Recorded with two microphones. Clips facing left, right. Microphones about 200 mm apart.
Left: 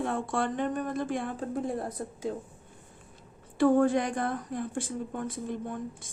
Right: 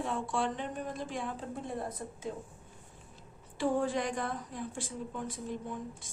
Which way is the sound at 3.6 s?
55° left (ahead or behind).